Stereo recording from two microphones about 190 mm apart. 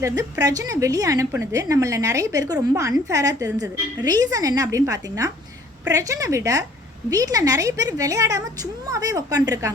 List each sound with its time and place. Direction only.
0.0 s a woman's voice: 20° right (ahead or behind)